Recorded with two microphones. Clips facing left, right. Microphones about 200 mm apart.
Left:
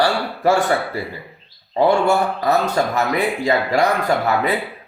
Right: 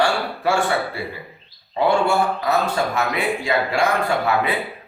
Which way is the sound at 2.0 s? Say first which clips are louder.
Left 2 dB; 40° left (ahead or behind).